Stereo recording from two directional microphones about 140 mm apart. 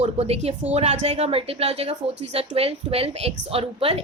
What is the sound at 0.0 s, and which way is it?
A woman's voice, 50° right (ahead or behind).